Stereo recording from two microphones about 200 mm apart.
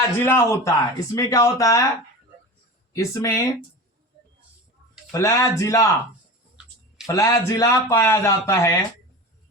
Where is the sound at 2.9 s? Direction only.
15° left (ahead or behind).